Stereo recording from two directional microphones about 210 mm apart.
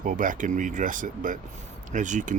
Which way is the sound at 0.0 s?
40° right (ahead or behind).